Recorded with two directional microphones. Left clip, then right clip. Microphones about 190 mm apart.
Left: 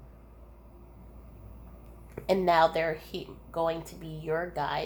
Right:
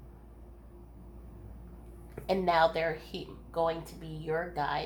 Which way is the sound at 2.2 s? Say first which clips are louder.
Left 3 dB; 45° left (ahead or behind).